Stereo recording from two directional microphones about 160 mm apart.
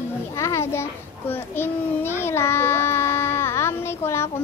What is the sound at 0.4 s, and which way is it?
Speech, 15° left (ahead or behind).